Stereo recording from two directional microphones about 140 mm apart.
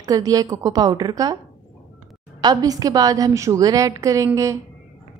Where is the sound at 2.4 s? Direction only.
25° right (ahead or behind).